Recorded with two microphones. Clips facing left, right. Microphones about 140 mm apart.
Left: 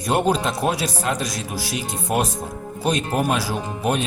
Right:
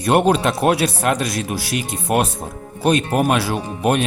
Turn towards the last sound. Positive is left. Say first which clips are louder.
# right 4 dB
turn(degrees=-65)  # may be behind; listen again after turning